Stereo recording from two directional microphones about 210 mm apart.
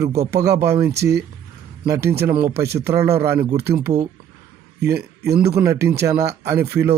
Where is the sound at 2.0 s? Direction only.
10° right (ahead or behind).